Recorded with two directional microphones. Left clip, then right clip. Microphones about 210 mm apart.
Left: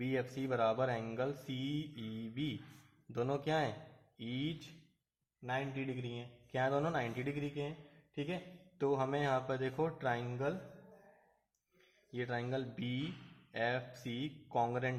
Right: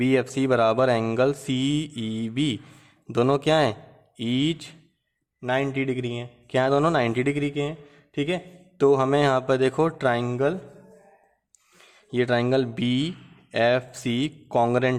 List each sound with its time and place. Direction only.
0.0 s speech: 50° right (ahead or behind)
8.8 s speech: 50° right (ahead or behind)
12.1 s speech: 50° right (ahead or behind)